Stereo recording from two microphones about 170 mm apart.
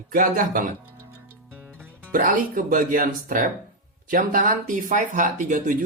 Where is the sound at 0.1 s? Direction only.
55° right (ahead or behind).